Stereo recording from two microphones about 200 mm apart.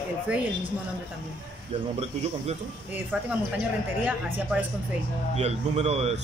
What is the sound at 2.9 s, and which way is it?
Speech, 10° right (ahead or behind).